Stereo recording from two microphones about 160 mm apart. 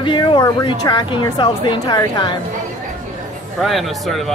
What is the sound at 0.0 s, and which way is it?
Speech, 30° left (ahead or behind).